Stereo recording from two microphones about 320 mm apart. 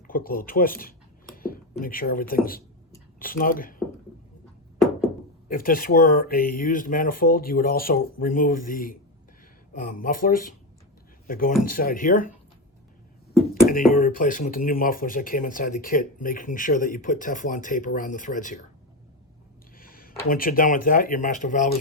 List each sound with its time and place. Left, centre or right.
0.1 s speech: left
4.8 s a sound: centre
5.5 s speech: left
13.5 s beatboxing: left
13.9 s speech: left
19.8 s a sound: left
20.2 s speech: left